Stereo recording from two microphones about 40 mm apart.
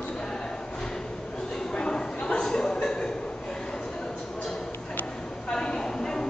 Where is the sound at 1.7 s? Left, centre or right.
Left.